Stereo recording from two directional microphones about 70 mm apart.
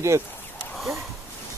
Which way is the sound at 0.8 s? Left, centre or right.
Centre.